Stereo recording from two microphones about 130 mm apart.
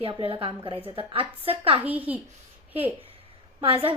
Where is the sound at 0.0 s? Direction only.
45° right (ahead or behind).